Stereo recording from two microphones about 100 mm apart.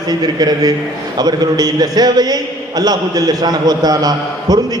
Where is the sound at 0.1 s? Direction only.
40° right (ahead or behind).